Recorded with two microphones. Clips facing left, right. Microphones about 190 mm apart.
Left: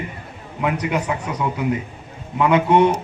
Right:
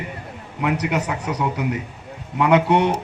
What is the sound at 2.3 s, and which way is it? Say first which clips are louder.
Speech: left 1 dB; 70° right (ahead or behind).